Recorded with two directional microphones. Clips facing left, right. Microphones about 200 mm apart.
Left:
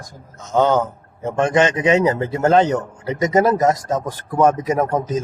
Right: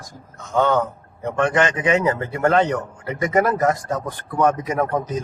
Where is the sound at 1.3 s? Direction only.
30° left (ahead or behind).